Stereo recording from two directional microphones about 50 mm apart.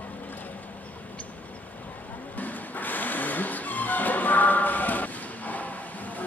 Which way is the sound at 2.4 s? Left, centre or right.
Left.